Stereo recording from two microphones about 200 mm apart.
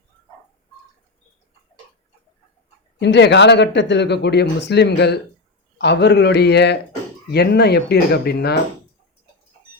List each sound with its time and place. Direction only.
3.0 s speech: 60° left (ahead or behind)